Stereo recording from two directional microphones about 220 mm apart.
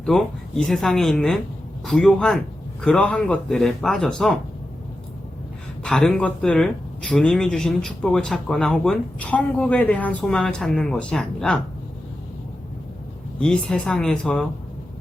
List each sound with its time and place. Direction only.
0.0 s speech: centre (ahead or behind)
5.8 s speech: 5° left (ahead or behind)
13.4 s speech: 5° left (ahead or behind)